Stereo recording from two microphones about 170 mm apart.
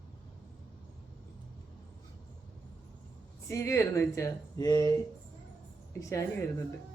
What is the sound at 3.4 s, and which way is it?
Speech, 15° left (ahead or behind).